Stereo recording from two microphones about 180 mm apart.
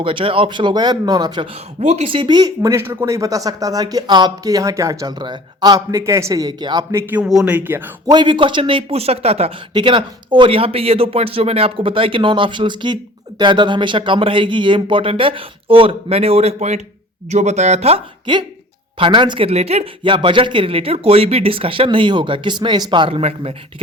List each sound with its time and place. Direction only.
0.0 s speech: 30° right (ahead or behind)
1.8 s speech: 35° right (ahead or behind); by 8.1 s 10° right (ahead or behind)
8.1 s speech: 25° right (ahead or behind)